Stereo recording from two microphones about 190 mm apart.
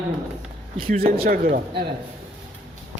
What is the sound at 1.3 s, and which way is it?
Speech, 50° right (ahead or behind).